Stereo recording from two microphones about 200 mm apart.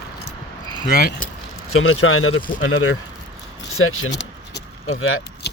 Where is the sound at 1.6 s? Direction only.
90° left.